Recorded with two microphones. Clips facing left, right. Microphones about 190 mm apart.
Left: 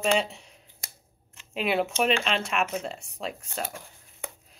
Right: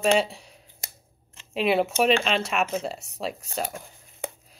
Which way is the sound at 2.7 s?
35° right (ahead or behind).